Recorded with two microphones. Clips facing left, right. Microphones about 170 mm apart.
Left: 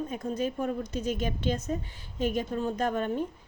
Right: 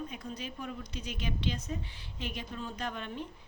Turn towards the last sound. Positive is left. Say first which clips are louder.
# left 10 dB
turn(degrees=45)  # may be behind; listen again after turning